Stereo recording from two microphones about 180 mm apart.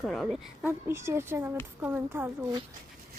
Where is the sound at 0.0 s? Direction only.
Centre (ahead or behind).